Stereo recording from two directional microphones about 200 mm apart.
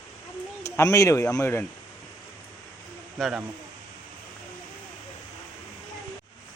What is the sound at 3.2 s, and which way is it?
Speech, 5° right (ahead or behind).